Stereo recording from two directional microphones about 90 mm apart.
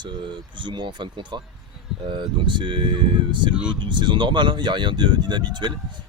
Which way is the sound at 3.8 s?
60° right (ahead or behind).